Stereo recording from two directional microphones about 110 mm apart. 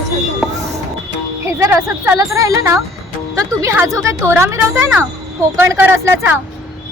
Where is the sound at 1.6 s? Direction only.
30° right (ahead or behind).